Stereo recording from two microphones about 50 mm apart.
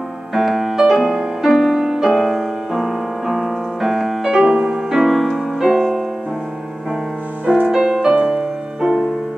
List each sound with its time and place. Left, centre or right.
0.3 s music: centre
4.2 s music: centre
5.0 s music: centre
7.4 s music: centre